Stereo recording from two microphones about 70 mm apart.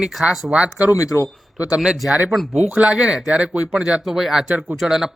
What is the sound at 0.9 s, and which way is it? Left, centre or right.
Speech, left.